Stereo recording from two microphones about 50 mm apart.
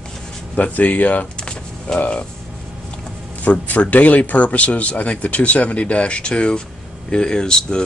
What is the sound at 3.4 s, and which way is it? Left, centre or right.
Speech, left.